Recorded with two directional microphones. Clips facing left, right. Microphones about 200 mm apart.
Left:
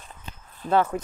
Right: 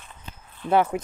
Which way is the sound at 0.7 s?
15° right (ahead or behind).